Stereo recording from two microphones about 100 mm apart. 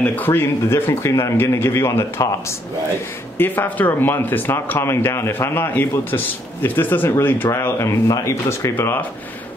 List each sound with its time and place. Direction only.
0.0 s speech: 15° left (ahead or behind)
3.3 s speech: 20° left (ahead or behind)
7.5 s speech: 30° left (ahead or behind)